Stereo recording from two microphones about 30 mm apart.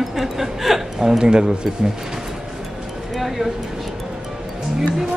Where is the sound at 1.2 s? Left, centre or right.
Right.